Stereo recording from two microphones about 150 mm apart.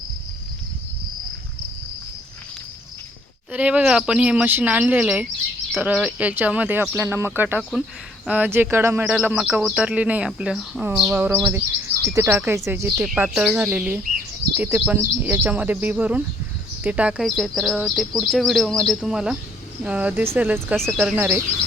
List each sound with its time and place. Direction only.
3.5 s speech: 10° right (ahead or behind)
9.0 s speech: 5° right (ahead or behind)
11.2 s speech: 15° right (ahead or behind)
13.1 s speech: 5° right (ahead or behind)
20.7 s speech: 5° left (ahead or behind)
21.2 s speech: 15° right (ahead or behind)